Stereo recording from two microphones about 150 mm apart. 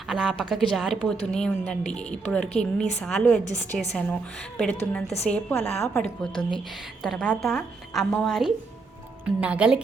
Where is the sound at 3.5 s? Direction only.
55° left (ahead or behind).